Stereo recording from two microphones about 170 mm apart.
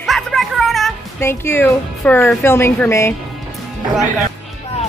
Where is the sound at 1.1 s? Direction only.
15° left (ahead or behind).